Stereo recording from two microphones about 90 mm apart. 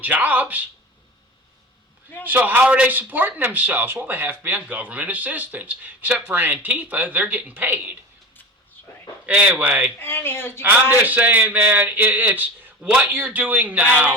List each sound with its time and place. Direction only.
0.0 s speech: 20° right (ahead or behind)
2.2 s speech: 20° right (ahead or behind)
9.2 s speech: 15° right (ahead or behind)
10.0 s speech: 25° left (ahead or behind)
11.0 s speech: 20° right (ahead or behind)